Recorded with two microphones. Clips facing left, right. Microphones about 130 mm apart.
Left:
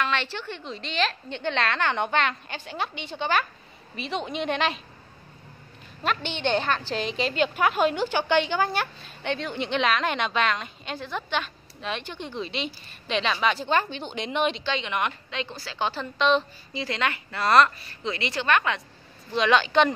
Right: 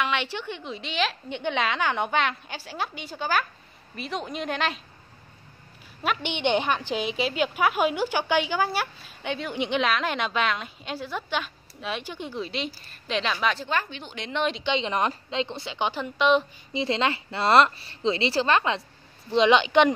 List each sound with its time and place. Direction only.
0.0 s a woman's voice: 15° right (ahead or behind)
6.0 s a woman's voice: 15° right (ahead or behind); by 13.6 s centre (ahead or behind)
13.7 s speech: 30° left (ahead or behind)
14.6 s a woman's voice: 20° right (ahead or behind)
14.9 s a woman's voice: 35° right (ahead or behind); by 16.4 s 10° right (ahead or behind)
16.7 s a woman's voice: 25° right (ahead or behind)